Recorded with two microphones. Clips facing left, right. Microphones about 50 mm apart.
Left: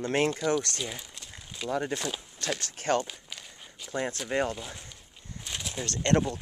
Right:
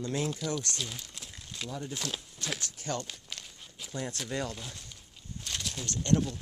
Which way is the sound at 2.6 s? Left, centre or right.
Left.